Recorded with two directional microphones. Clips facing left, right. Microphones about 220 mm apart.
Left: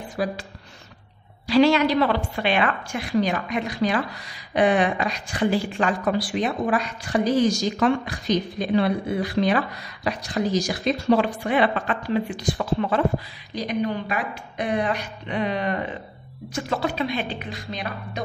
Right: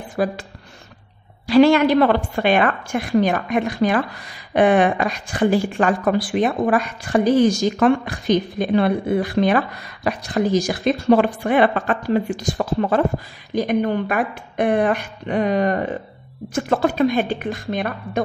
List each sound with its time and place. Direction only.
0.2 s a woman's voice: 50° right (ahead or behind)
1.5 s a woman's voice: 50° right (ahead or behind)